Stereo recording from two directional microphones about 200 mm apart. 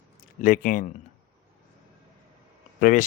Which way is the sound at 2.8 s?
45° left (ahead or behind).